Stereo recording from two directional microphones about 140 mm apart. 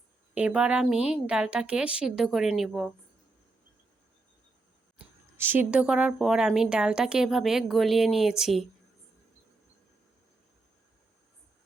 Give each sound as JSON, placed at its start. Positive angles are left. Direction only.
{"t": 0.3, "sound": "a woman's voice", "side_deg": -10}
{"t": 4.9, "sound": "a woman's voice", "side_deg": -15}